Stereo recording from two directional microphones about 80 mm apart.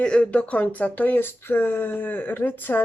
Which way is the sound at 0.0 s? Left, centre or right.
Centre.